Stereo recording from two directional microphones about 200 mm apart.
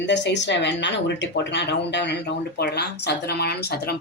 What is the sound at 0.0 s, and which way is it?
A woman's voice, 60° left (ahead or behind).